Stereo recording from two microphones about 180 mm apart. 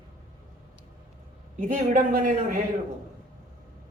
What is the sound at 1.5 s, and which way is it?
A man's voice, 50° right (ahead or behind).